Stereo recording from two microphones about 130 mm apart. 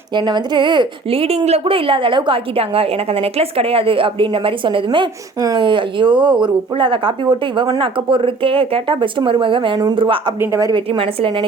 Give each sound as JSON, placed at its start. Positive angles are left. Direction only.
{"t": 0.2, "sound": "a woman's voice", "side_deg": -35}
{"t": 10.4, "sound": "a woman's voice", "side_deg": -25}
{"t": 10.8, "sound": "speech", "side_deg": -45}